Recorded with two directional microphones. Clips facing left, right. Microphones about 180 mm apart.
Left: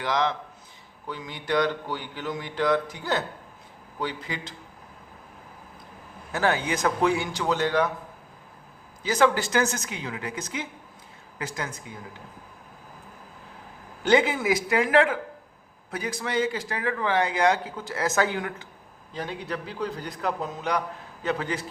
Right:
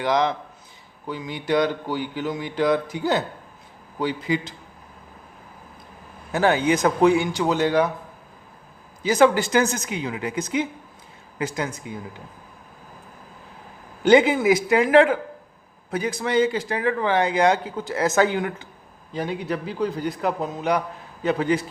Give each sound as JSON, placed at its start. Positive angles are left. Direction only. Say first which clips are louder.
{"t": 0.0, "sound": "speech", "louder": "right 4 dB", "side_deg": -15}
{"t": 6.3, "sound": "speech", "louder": "right 6 dB", "side_deg": -20}
{"t": 9.0, "sound": "speech", "louder": "right 5 dB", "side_deg": -15}
{"t": 14.0, "sound": "speech", "louder": "right 6 dB", "side_deg": -15}
{"t": 19.1, "sound": "speech", "louder": "right 6 dB", "side_deg": -10}